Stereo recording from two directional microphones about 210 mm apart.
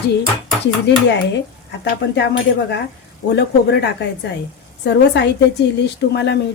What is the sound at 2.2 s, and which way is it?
A woman's voice, 55° left (ahead or behind).